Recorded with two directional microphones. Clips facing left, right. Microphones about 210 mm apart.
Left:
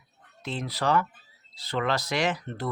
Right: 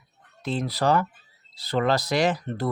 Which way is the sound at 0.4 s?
35° right (ahead or behind).